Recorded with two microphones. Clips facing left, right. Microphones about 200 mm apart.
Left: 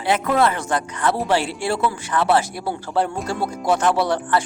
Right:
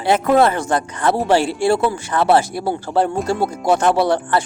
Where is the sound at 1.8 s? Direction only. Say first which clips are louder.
Right 3 dB; 30° right (ahead or behind).